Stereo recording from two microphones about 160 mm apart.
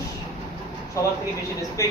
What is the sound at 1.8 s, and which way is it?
Speech, 20° left (ahead or behind).